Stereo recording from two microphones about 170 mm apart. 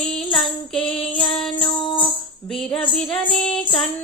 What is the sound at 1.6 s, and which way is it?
Music, 30° left (ahead or behind).